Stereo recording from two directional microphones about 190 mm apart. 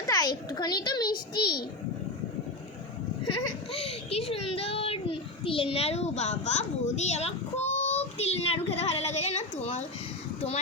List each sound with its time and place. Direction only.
0.1 s a child's voice: 20° left (ahead or behind)
3.2 s a child's voice: 30° left (ahead or behind)